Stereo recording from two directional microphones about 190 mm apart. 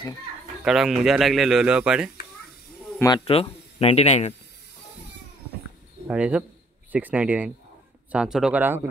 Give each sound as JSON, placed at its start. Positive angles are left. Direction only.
{"t": 0.7, "sound": "speech", "side_deg": 0}
{"t": 3.3, "sound": "speech", "side_deg": 30}
{"t": 6.0, "sound": "speech", "side_deg": -5}